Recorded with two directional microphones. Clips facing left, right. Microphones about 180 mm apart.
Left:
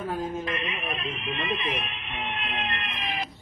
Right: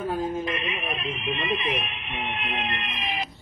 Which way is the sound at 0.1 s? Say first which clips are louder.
Right 2 dB; 15° right (ahead or behind).